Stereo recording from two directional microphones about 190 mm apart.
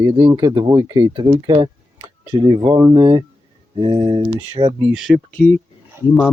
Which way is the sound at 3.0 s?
25° right (ahead or behind).